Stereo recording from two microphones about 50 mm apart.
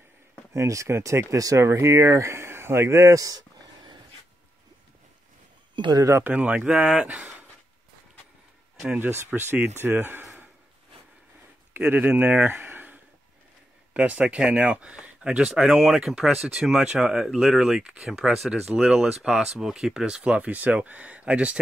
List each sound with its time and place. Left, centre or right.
0.5 s speech: right
6.2 s speech: right
9.0 s speech: right
11.7 s speech: right
13.9 s speech: right; by 16.7 s centre
16.7 s speech: centre